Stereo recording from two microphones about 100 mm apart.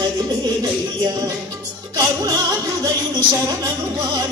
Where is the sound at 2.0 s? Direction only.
35° right (ahead or behind).